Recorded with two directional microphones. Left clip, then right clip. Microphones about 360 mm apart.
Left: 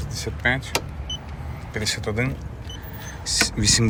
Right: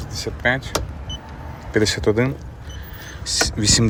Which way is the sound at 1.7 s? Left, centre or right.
Centre.